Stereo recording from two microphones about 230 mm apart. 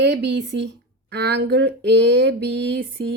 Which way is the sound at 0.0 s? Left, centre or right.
Right.